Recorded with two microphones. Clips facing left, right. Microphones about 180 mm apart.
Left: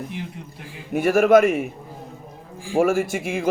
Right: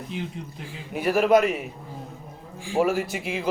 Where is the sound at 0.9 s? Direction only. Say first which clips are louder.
Left 4 dB; 45° left (ahead or behind).